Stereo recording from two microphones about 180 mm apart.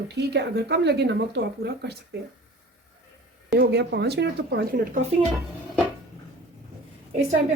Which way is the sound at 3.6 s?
70° right (ahead or behind).